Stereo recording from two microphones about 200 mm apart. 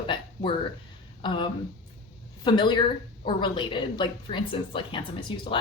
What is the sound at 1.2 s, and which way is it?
A woman's voice, 25° left (ahead or behind).